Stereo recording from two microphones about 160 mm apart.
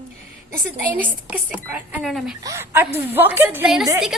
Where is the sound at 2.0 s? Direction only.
Centre (ahead or behind).